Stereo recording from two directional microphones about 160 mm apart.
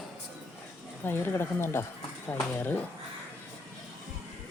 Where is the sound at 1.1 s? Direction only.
15° left (ahead or behind).